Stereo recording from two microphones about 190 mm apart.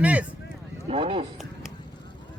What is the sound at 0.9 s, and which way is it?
Speech, 30° right (ahead or behind).